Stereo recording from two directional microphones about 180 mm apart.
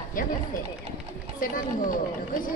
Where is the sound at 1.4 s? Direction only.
50° left (ahead or behind).